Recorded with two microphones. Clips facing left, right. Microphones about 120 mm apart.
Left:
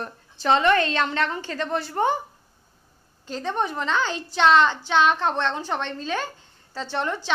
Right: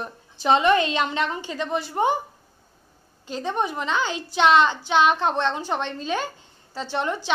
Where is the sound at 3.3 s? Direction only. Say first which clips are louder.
Right 1 dB; 10° right (ahead or behind).